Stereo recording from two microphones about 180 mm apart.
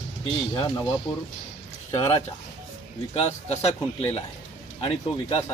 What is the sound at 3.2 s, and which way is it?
Speech, 35° left (ahead or behind).